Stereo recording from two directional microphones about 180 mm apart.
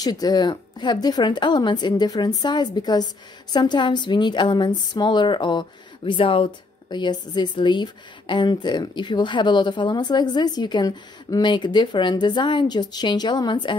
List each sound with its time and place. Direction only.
0.0 s speech: 20° left (ahead or behind)